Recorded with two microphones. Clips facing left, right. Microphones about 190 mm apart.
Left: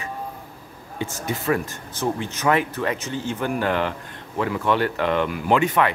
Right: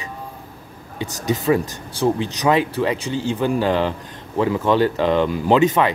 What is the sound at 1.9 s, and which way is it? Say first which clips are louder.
Speech: right 6 dB; 35° right (ahead or behind).